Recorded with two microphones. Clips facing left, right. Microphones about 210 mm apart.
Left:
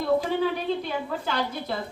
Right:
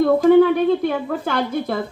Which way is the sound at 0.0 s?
50° right (ahead or behind).